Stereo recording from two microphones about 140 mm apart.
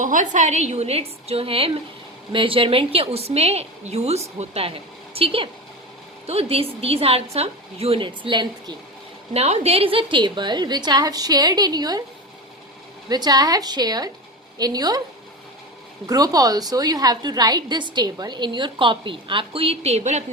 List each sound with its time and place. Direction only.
0.0 s a woman's voice: 65° right (ahead or behind); by 8.7 s 35° right (ahead or behind)
9.3 s a woman's voice: 45° right (ahead or behind); by 12.0 s 30° right (ahead or behind)
13.1 s a woman's voice: 30° right (ahead or behind)
16.0 s a woman's voice: 25° right (ahead or behind); by 20.2 s 55° right (ahead or behind)